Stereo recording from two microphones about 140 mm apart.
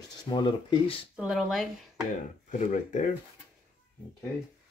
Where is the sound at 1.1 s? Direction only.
Centre (ahead or behind).